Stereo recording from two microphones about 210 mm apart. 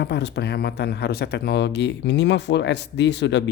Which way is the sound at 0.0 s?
55° left (ahead or behind).